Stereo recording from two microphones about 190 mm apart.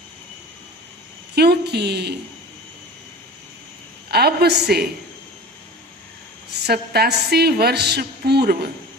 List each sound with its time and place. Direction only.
1.4 s a woman's voice: 60° right (ahead or behind)
4.1 s a woman's voice: 55° right (ahead or behind)
6.7 s a woman's voice: 55° right (ahead or behind)